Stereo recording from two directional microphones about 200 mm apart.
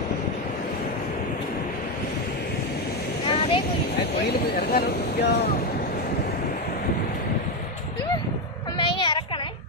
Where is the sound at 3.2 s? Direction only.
25° left (ahead or behind).